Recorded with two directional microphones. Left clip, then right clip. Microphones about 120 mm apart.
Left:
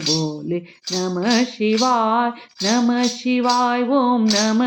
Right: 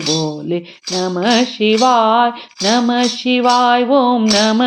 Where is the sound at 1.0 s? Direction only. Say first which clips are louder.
Right 5 dB; 30° right (ahead or behind).